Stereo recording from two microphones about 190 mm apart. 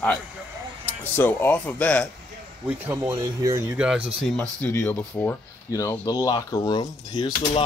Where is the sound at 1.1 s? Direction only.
10° left (ahead or behind).